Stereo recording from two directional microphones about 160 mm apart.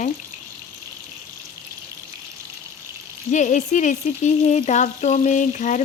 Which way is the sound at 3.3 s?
50° left (ahead or behind).